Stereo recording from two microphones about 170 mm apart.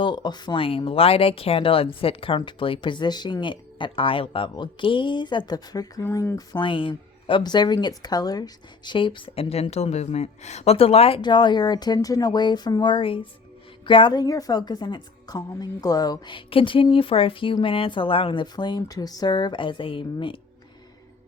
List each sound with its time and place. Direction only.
0.0 s speech: 25° left (ahead or behind)